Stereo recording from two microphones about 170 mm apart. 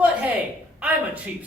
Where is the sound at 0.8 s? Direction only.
10° right (ahead or behind).